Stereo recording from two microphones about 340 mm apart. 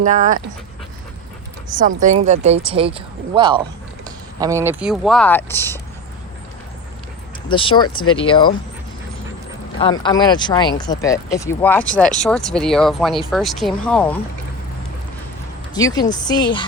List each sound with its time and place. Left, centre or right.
0.0 s speech: right
2.0 s speech: right; by 5.8 s centre
7.5 s speech: centre
10.0 s speech: centre
15.7 s speech: centre